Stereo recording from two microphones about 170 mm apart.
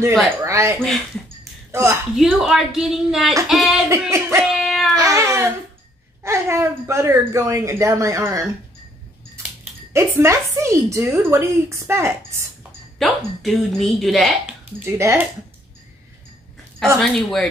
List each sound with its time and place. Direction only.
0.4 s a woman's voice: 15° right (ahead or behind)
2.1 s speech: centre (ahead or behind)
3.9 s a woman's voice: 15° right (ahead or behind)
4.6 s a sound: centre (ahead or behind)
4.9 s a woman's voice: 20° right (ahead or behind)
9.9 s a woman's voice: 15° right (ahead or behind)
13.0 s speech: centre (ahead or behind)
14.6 s speech: 15° right (ahead or behind)
17.0 s speech: centre (ahead or behind)